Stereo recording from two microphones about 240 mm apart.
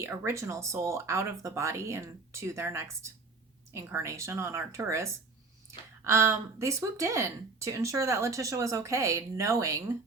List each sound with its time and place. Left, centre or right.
0.0 s speech: centre
6.1 s speech: centre